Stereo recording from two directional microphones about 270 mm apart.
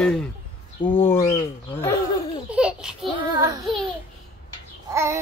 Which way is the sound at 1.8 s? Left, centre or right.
Centre.